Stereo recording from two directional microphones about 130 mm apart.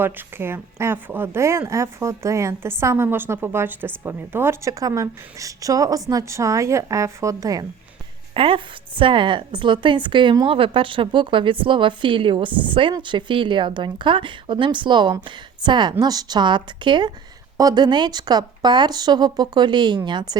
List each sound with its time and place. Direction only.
0.0 s speech: 15° right (ahead or behind)
8.3 s a woman's voice: 45° right (ahead or behind)